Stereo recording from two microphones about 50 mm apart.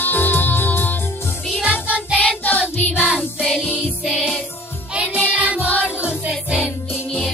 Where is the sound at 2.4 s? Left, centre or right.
Left.